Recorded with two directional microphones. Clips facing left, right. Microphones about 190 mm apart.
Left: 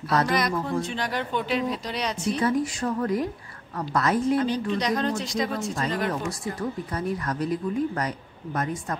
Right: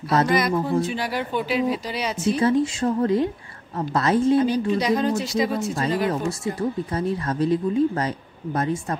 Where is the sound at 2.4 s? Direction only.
25° right (ahead or behind).